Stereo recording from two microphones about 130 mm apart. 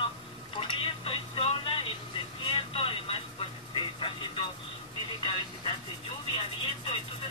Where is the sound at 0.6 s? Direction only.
40° left (ahead or behind).